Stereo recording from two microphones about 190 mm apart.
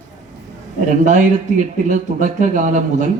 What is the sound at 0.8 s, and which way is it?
Speech, 40° right (ahead or behind).